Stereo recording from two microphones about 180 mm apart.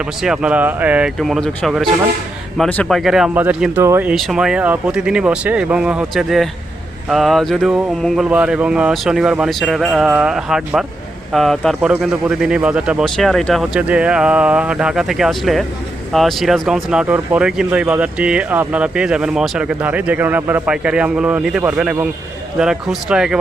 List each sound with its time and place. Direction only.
0.0 s speech: 5° right (ahead or behind)
4.1 s speech: centre (ahead or behind)